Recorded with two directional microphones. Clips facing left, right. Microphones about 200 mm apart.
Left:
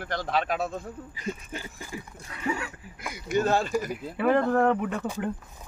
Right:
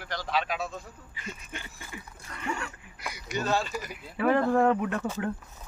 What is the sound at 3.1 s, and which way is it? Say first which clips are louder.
Speech: left 5 dB; 50° left (ahead or behind).